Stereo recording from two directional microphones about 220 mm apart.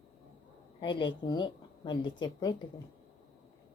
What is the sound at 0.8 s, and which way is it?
A woman's voice, 20° left (ahead or behind).